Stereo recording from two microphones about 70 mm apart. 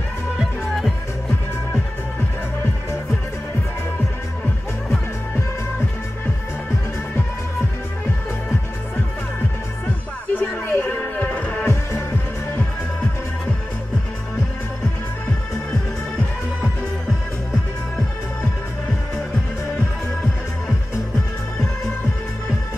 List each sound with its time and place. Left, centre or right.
0.4 s music: centre
10.3 s a sound: left
11.6 s music: left